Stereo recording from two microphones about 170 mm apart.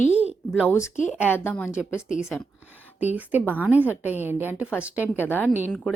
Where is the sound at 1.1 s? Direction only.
5° right (ahead or behind).